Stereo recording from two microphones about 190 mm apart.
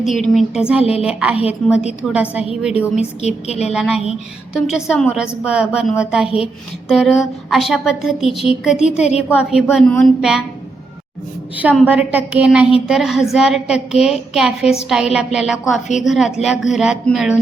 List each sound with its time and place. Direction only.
0.0 s a woman's voice: centre (ahead or behind)
3.2 s a woman's voice: 35° left (ahead or behind)
3.7 s a woman's voice: 5° right (ahead or behind)
11.5 s a woman's voice: 5° right (ahead or behind)